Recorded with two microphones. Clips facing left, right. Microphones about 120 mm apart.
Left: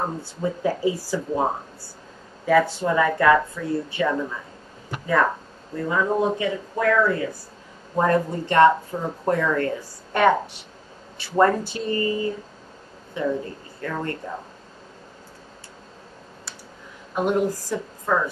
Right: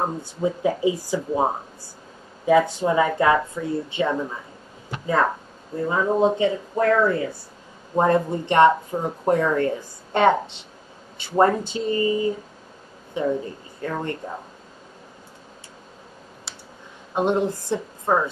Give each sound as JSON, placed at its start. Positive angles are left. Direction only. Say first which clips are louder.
{"t": 0.0, "sound": "a woman's voice", "louder": "right 2 dB", "side_deg": -15}
{"t": 17.1, "sound": "speech", "louder": "right 1 dB", "side_deg": -25}